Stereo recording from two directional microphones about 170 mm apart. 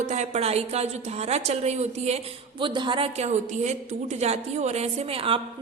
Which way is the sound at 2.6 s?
30° right (ahead or behind).